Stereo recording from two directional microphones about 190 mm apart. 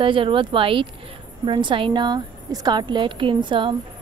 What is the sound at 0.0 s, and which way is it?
A woman's voice, 25° right (ahead or behind).